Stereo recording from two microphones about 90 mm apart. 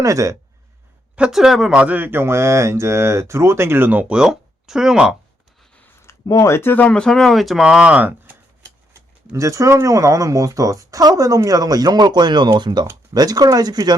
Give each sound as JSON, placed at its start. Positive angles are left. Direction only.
{"t": 0.0, "sound": "speech", "side_deg": -40}
{"t": 1.1, "sound": "speech", "side_deg": -10}
{"t": 1.7, "sound": "speech", "side_deg": -15}
{"t": 4.1, "sound": "speech", "side_deg": -5}
{"t": 6.2, "sound": "speech", "side_deg": 35}
{"t": 8.9, "sound": "speech", "side_deg": -35}